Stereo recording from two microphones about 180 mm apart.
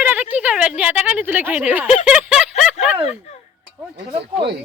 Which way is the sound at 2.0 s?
5° right (ahead or behind).